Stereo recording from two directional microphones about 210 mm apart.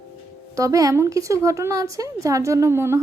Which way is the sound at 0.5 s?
15° right (ahead or behind).